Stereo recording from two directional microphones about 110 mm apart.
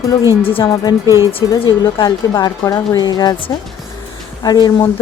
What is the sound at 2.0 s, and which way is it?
Speech, 30° left (ahead or behind).